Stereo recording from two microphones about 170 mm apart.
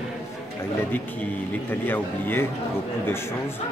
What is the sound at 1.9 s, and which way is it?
Speech, 10° left (ahead or behind).